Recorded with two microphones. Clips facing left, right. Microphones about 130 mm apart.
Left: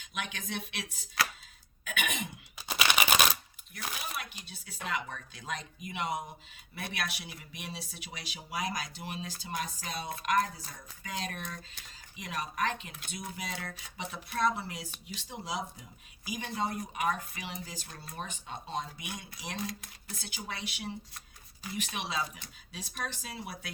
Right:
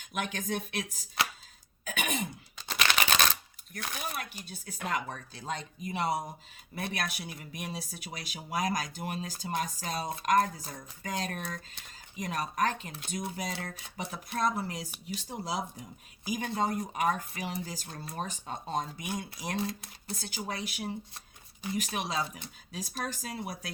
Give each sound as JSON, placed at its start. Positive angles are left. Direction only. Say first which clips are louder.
{"t": 0.0, "sound": "speech", "louder": "right 5 dB", "side_deg": -45}
{"t": 1.2, "sound": "a sound", "louder": "even", "side_deg": -25}
{"t": 1.8, "sound": "throat clearing", "louder": "right 2 dB", "side_deg": -35}
{"t": 2.6, "sound": "typewriter", "louder": "even", "side_deg": 10}
{"t": 3.7, "sound": "speech", "louder": "right 2 dB", "side_deg": -45}
{"t": 19.6, "sound": "speech", "louder": "right 4 dB", "side_deg": -30}